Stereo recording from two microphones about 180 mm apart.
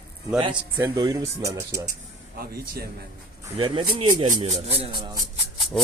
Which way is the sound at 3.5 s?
30° right (ahead or behind).